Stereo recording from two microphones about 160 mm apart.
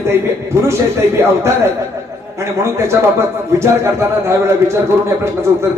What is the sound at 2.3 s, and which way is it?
Speech, 15° right (ahead or behind).